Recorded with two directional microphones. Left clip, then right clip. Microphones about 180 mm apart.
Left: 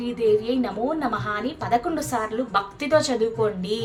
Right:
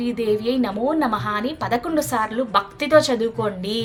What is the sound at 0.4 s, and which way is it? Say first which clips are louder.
A woman's voice: right 3 dB; 30° right (ahead or behind).